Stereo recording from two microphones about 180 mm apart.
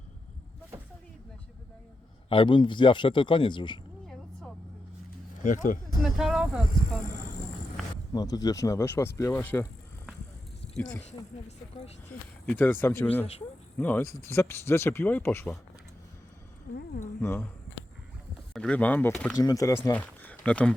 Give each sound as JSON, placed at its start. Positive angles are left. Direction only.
{"t": 2.3, "sound": "speech", "side_deg": 30}
{"t": 5.4, "sound": "speech", "side_deg": 45}
{"t": 6.0, "sound": "speech", "side_deg": 0}
{"t": 8.1, "sound": "speech", "side_deg": 20}
{"t": 12.5, "sound": "speech", "side_deg": 10}
{"t": 17.2, "sound": "speech", "side_deg": 10}
{"t": 18.5, "sound": "speech", "side_deg": 5}
{"t": 19.4, "sound": "speech", "side_deg": 20}